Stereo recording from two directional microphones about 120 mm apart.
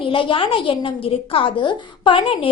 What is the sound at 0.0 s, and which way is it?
A woman's voice, 45° left (ahead or behind).